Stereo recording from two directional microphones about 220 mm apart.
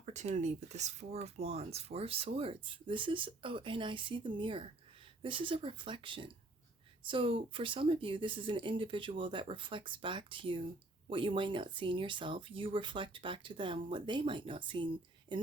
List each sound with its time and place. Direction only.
0.0 s speech: 30° right (ahead or behind)
15.3 s speech: 35° right (ahead or behind)